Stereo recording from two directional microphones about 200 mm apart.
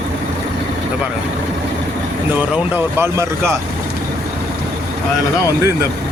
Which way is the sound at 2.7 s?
10° right (ahead or behind).